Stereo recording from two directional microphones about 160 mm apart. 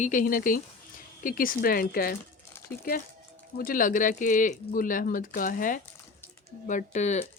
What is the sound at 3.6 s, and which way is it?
Speech, 60° left (ahead or behind).